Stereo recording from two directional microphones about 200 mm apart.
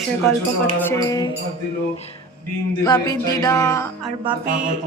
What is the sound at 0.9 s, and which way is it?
Music, 15° left (ahead or behind).